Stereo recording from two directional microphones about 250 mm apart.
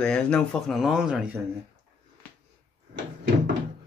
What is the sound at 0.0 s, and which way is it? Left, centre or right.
Speech, centre.